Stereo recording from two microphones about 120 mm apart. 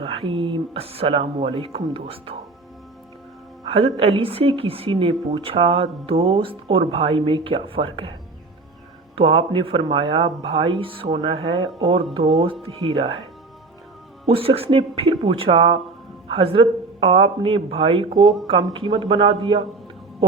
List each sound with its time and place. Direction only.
0.0 s a woman's voice: 55° right (ahead or behind)
3.7 s a woman's voice: 50° right (ahead or behind)
9.1 s a woman's voice: 50° right (ahead or behind)
14.3 s a woman's voice: 50° right (ahead or behind)